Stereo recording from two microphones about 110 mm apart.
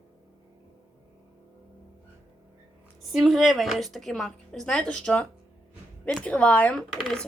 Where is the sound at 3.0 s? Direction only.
Centre (ahead or behind).